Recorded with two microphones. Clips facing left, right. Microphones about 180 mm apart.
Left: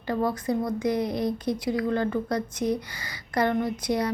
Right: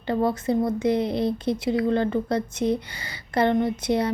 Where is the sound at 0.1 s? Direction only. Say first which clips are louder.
Right 3 dB; 25° right (ahead or behind).